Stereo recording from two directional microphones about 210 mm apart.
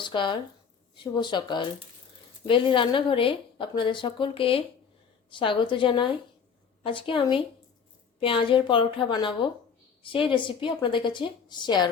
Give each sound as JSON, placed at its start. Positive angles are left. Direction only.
{"t": 0.0, "sound": "a woman's voice", "side_deg": 20}